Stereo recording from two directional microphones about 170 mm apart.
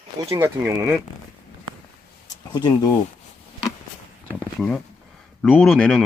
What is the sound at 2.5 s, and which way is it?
Speech, 25° left (ahead or behind).